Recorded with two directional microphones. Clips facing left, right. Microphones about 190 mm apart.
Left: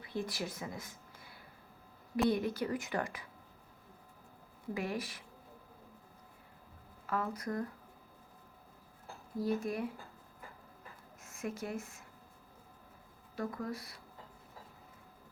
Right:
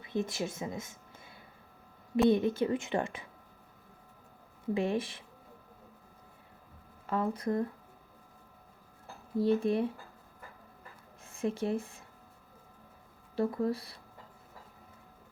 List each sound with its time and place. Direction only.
0.0 s a woman's voice: 20° right (ahead or behind)
4.7 s a woman's voice: 25° right (ahead or behind)
7.1 s a woman's voice: 30° right (ahead or behind)
9.4 s a woman's voice: 30° right (ahead or behind)
11.2 s speech: 30° right (ahead or behind)
13.3 s speech: 30° right (ahead or behind)